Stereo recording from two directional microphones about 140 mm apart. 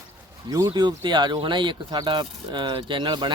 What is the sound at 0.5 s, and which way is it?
Speech, 30° right (ahead or behind).